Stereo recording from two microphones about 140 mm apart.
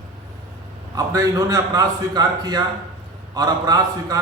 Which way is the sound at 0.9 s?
25° right (ahead or behind).